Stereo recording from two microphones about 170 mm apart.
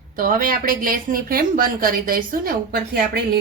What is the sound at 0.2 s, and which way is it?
A woman's voice, 55° right (ahead or behind).